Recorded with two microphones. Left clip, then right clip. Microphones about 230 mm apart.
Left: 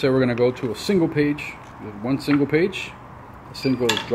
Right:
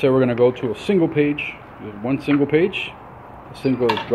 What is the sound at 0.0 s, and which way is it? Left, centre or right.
Speech, centre.